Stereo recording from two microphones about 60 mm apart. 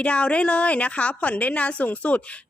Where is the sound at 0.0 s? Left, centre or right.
Centre.